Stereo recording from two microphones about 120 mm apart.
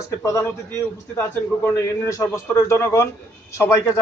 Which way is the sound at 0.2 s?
25° left (ahead or behind).